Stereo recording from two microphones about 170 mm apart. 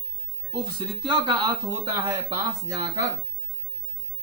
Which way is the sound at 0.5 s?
30° right (ahead or behind).